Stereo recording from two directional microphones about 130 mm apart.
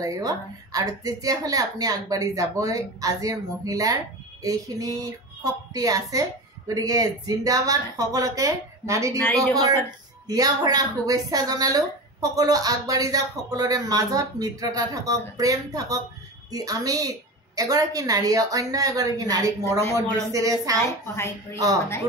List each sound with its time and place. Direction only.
0.0 s a woman's voice: 25° right (ahead or behind)
10.2 s a woman's voice: 30° right (ahead or behind)
20.8 s a woman's voice: 20° left (ahead or behind)